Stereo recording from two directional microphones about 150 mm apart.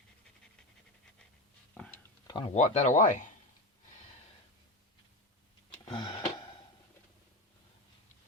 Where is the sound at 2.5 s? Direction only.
50° left (ahead or behind).